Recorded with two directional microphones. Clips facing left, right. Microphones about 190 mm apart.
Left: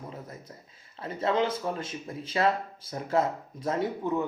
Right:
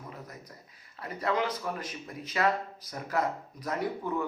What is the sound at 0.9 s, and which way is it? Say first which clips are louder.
Speech: left 3 dB; 25° left (ahead or behind).